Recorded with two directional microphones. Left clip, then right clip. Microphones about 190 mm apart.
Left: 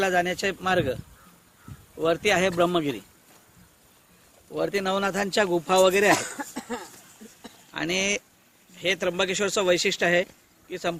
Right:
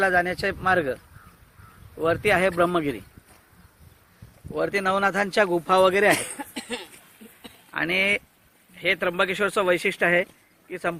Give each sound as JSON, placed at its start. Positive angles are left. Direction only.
{"t": 0.0, "sound": "speech", "side_deg": -15}
{"t": 2.0, "sound": "speech", "side_deg": -20}
{"t": 4.5, "sound": "speech", "side_deg": -20}
{"t": 6.3, "sound": "a sound", "side_deg": 25}
{"t": 7.7, "sound": "speech", "side_deg": -10}